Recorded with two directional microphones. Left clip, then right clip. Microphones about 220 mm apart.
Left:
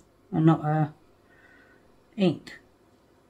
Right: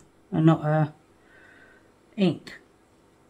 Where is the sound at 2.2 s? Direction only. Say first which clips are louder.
Even; centre (ahead or behind).